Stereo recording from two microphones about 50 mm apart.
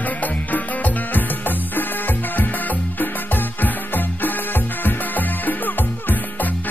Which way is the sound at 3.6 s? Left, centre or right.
Left.